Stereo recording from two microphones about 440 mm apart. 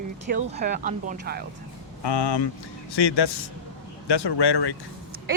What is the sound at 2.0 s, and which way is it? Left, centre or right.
Speech, left.